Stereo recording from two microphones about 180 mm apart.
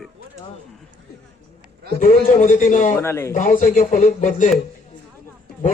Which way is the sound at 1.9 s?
45° left (ahead or behind).